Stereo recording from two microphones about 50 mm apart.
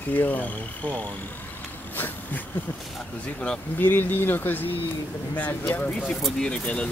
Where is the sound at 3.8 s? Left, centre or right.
Left.